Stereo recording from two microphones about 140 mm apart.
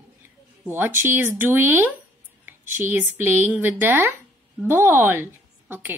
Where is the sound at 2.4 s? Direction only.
15° right (ahead or behind).